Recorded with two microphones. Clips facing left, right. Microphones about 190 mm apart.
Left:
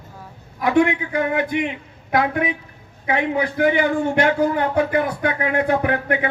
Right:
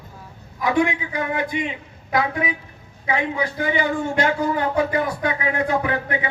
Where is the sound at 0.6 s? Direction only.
55° left (ahead or behind).